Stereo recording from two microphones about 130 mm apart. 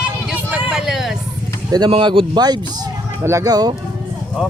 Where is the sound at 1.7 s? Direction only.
30° right (ahead or behind).